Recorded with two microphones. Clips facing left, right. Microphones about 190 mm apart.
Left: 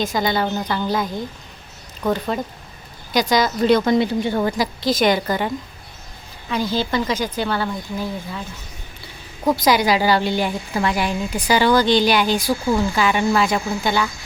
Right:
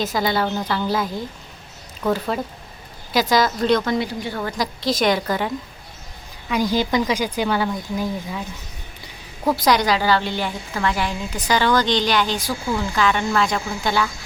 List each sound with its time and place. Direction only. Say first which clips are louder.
0.0 s a woman's voice: left 1 dB; 5° right (ahead or behind)
2.1 s a woman's voice: even; centre (ahead or behind)
3.8 s speech: left 5 dB; 25° left (ahead or behind)
4.5 s a woman's voice: left 2 dB; centre (ahead or behind)
6.5 s speech: right 2 dB; 10° right (ahead or behind)
9.6 s a woman's voice: left 1 dB; 5° left (ahead or behind)